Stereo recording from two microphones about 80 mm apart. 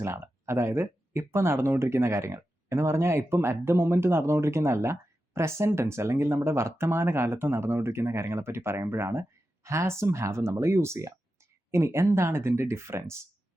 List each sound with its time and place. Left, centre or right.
0.0 s speech: right